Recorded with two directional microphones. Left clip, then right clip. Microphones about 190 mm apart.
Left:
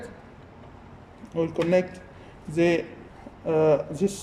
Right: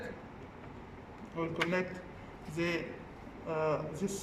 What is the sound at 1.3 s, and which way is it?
Speech, 35° left (ahead or behind).